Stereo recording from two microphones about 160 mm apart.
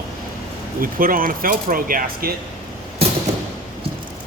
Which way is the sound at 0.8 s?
60° right (ahead or behind).